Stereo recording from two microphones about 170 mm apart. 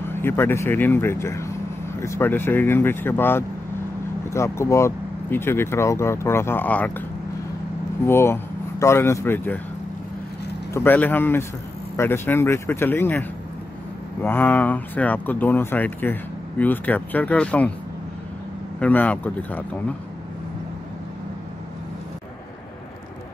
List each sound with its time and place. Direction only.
0.0 s speech: 15° left (ahead or behind)
8.0 s speech: 15° left (ahead or behind)
10.7 s speech: 10° left (ahead or behind)
14.2 s speech: 10° left (ahead or behind)
18.8 s speech: 10° left (ahead or behind)